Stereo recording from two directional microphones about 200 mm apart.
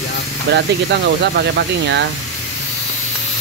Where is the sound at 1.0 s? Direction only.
60° right (ahead or behind).